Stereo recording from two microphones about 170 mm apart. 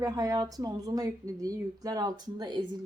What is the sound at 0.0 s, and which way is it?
A woman's voice, 20° right (ahead or behind).